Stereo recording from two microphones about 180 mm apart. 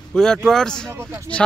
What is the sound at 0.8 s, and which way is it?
Speech, 15° right (ahead or behind).